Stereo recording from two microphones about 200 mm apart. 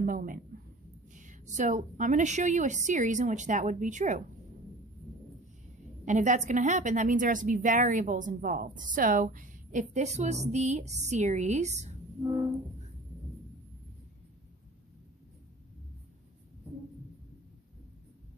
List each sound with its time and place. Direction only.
0.0 s a woman's voice: 45° right (ahead or behind)
6.0 s a woman's voice: 40° right (ahead or behind)